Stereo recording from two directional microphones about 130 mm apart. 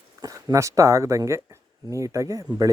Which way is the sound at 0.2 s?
30° right (ahead or behind).